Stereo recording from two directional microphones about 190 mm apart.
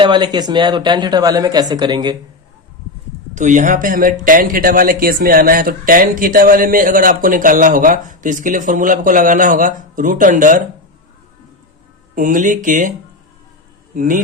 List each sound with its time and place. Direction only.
0.0 s speech: 25° right (ahead or behind)
3.3 s speech: 40° right (ahead or behind)
12.1 s speech: 45° right (ahead or behind)
13.9 s a man's voice: 45° right (ahead or behind)